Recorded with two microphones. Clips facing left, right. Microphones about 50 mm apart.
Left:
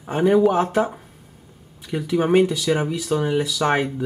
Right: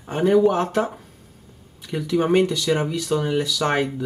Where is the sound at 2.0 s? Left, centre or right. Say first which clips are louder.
Left 1 dB; centre.